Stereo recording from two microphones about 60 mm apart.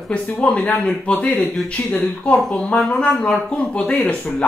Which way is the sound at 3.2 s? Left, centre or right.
Centre.